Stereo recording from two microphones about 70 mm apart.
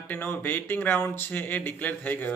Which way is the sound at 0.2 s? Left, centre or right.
Left.